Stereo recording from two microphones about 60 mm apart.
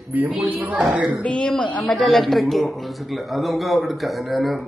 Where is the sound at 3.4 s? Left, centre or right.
Centre.